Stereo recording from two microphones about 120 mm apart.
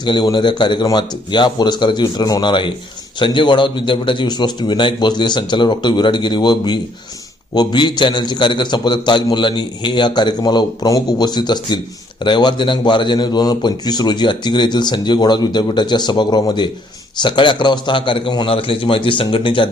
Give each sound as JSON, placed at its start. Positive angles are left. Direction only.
{"t": 0.0, "sound": "a man's voice", "side_deg": 40}